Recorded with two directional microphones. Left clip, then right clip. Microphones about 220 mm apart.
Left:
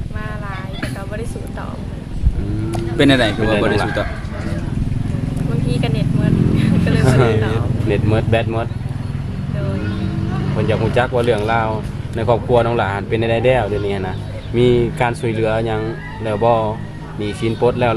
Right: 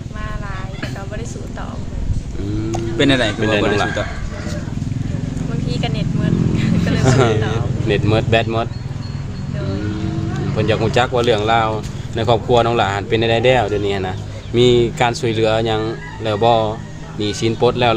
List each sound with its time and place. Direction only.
3.0 s speech: 5° left (ahead or behind)
5.6 s speech: centre (ahead or behind)
7.0 s speech: 40° right (ahead or behind)
7.3 s speech: 5° left (ahead or behind)
7.9 s speech: 45° right (ahead or behind)
10.6 s speech: 45° right (ahead or behind)